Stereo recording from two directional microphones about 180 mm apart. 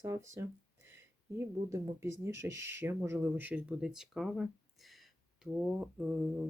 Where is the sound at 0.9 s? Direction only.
15° right (ahead or behind).